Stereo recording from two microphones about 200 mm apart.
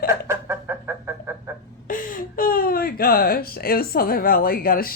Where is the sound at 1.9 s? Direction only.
45° left (ahead or behind).